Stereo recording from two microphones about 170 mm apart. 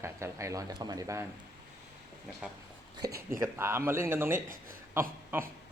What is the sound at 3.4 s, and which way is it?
Speech, 15° right (ahead or behind).